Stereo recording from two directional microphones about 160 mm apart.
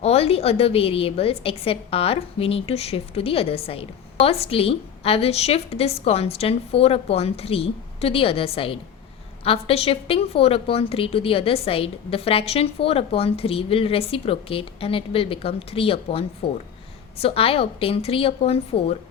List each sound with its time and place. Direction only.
0.0 s a woman's voice: 40° left (ahead or behind)